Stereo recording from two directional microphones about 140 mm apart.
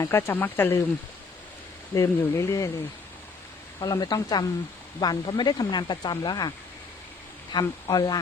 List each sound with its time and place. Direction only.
0.0 s speech: 20° left (ahead or behind)
2.0 s speech: 20° left (ahead or behind)
3.8 s speech: 30° left (ahead or behind)
7.6 s speech: 30° left (ahead or behind)